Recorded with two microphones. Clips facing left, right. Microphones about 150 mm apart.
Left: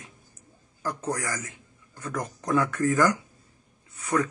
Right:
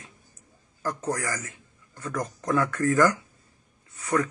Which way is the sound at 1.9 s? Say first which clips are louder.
Right 1 dB; 15° left (ahead or behind).